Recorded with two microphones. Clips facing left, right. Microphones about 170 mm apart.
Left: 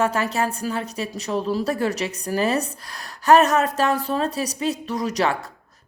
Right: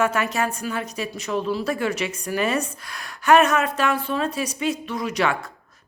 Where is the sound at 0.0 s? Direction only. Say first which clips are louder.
Even; 30° left (ahead or behind).